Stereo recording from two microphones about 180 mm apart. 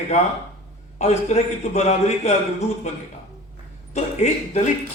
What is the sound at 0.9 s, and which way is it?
Speech, 40° left (ahead or behind).